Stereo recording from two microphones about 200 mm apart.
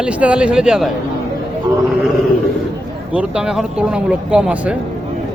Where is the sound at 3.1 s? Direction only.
5° right (ahead or behind).